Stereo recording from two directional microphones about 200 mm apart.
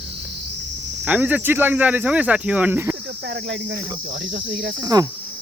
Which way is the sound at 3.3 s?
60° right (ahead or behind).